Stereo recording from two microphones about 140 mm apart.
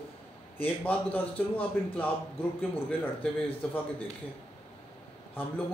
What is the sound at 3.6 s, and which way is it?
Speech, 5° left (ahead or behind).